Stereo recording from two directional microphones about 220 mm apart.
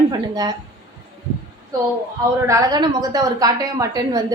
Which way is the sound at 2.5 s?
15° right (ahead or behind).